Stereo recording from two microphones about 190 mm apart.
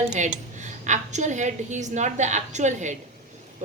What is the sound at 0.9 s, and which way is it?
A woman's voice, 40° right (ahead or behind).